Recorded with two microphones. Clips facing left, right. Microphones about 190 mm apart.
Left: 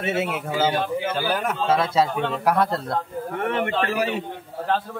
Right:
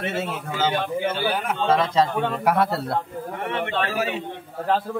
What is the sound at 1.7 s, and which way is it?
A man's voice, 10° left (ahead or behind).